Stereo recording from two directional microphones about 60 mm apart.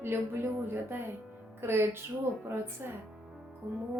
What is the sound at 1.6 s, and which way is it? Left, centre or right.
Speech, right.